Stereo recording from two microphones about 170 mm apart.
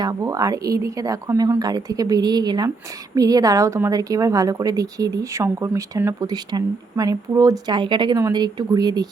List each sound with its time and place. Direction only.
0.0 s a woman's voice: 20° right (ahead or behind)